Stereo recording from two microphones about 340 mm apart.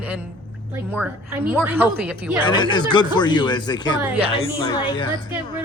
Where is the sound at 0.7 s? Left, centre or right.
Centre.